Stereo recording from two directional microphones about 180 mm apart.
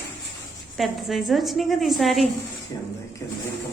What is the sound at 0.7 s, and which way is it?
A woman's voice, centre (ahead or behind).